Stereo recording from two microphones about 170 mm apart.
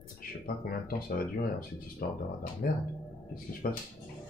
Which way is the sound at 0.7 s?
60° left (ahead or behind).